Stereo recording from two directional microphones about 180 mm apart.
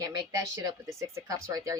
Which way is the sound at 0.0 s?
20° right (ahead or behind).